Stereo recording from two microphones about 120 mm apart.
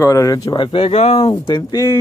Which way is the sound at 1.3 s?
35° left (ahead or behind).